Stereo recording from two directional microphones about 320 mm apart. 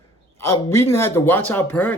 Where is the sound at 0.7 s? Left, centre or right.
Centre.